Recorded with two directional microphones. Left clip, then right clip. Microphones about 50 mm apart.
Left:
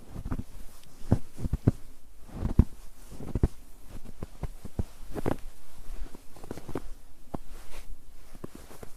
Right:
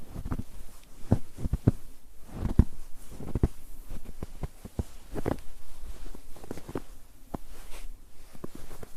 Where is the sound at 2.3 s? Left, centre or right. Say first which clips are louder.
Even; right.